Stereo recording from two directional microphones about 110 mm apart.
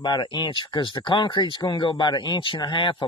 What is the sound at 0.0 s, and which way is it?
Speech, 40° left (ahead or behind).